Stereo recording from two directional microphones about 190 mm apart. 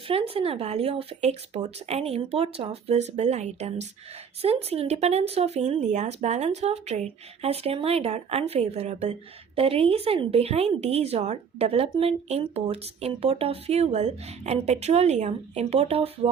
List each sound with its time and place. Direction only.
0.1 s speech: 30° right (ahead or behind)